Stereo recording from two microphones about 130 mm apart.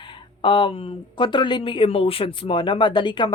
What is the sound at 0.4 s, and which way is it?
Speech, 40° left (ahead or behind).